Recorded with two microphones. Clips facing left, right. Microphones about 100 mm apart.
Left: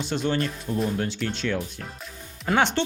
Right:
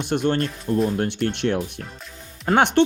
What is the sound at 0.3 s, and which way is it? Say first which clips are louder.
Speech: right 4 dB; centre (ahead or behind).